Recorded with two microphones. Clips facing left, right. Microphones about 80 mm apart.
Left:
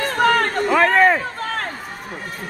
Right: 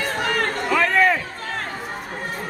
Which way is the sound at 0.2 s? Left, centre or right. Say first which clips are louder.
Left 9 dB; left.